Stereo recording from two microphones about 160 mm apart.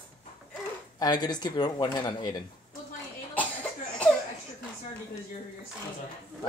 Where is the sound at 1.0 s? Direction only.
25° left (ahead or behind).